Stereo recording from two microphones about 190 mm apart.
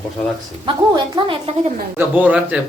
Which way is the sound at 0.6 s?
25° right (ahead or behind).